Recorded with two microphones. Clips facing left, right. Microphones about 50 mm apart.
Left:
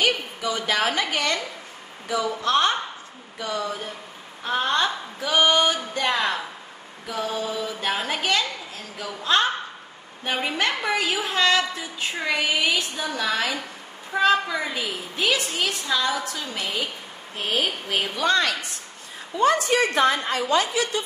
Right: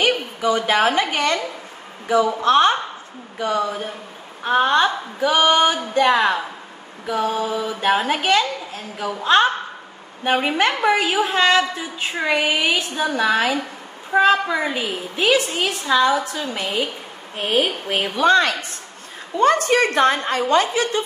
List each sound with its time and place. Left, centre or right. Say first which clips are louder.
0.0 s a woman's voice: right 4 dB; right
17.8 s a woman's voice: right 7 dB; right
19.3 s a woman's voice: right 4 dB; right